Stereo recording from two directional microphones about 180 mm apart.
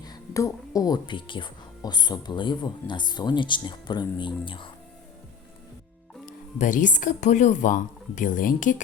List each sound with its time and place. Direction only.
0.0 s speech: 20° left (ahead or behind)
6.6 s speech: 45° left (ahead or behind)